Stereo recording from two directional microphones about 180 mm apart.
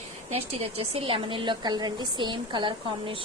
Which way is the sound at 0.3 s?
30° right (ahead or behind).